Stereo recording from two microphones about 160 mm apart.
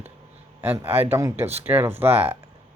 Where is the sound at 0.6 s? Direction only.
10° right (ahead or behind).